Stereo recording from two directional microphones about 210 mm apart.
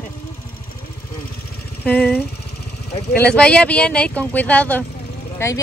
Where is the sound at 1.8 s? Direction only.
5° left (ahead or behind).